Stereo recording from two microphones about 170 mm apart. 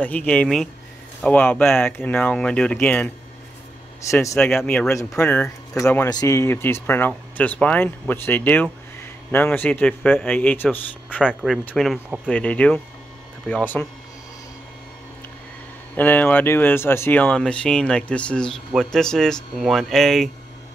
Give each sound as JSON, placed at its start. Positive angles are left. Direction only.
{"t": 0.0, "sound": "speech", "side_deg": 10}
{"t": 4.1, "sound": "speech", "side_deg": 15}
{"t": 4.4, "sound": "speech", "side_deg": 5}
{"t": 6.0, "sound": "speech", "side_deg": 20}
{"t": 11.2, "sound": "speech", "side_deg": 0}
{"t": 16.0, "sound": "speech", "side_deg": 10}